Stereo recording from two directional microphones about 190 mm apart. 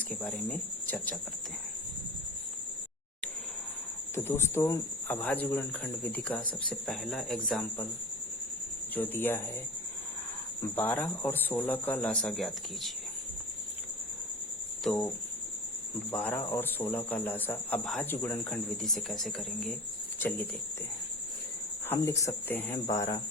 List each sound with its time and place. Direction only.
0.3 s speech: 5° left (ahead or behind)
4.1 s speech: 15° left (ahead or behind)
9.0 s speech: 10° left (ahead or behind)
10.8 s speech: 10° left (ahead or behind)
14.8 s speech: centre (ahead or behind)
16.1 s speech: 10° left (ahead or behind)
21.8 s speech: 15° left (ahead or behind)